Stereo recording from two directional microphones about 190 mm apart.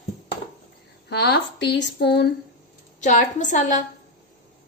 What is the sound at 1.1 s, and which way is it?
Speech, 65° left (ahead or behind).